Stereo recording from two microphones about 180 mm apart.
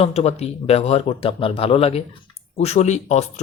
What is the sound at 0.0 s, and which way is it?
Speech, 35° left (ahead or behind).